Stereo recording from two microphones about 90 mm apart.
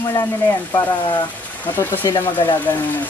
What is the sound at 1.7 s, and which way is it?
Speech, 25° left (ahead or behind).